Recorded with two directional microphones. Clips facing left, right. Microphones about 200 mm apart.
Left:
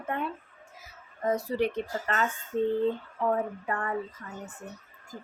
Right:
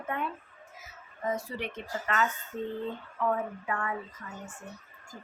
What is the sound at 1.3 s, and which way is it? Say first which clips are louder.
Speech: left 6 dB; 40° left (ahead or behind).